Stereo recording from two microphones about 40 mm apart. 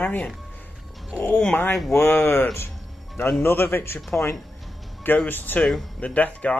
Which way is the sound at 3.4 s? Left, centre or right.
Left.